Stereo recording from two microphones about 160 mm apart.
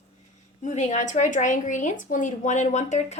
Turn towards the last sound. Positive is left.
turn(degrees=45)  # may be behind; listen again after turning